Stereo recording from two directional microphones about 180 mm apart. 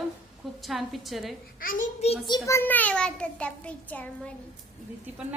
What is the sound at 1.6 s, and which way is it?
Speech, 50° left (ahead or behind).